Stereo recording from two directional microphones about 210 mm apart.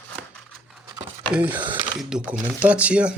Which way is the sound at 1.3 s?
10° right (ahead or behind).